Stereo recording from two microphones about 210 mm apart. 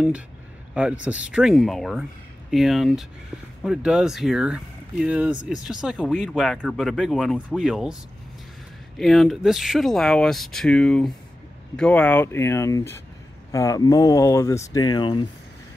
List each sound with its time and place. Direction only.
0.7 s speech: 5° right (ahead or behind); by 15.2 s 20° left (ahead or behind)